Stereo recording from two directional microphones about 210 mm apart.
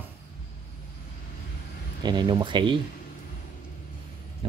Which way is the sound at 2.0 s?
20° right (ahead or behind).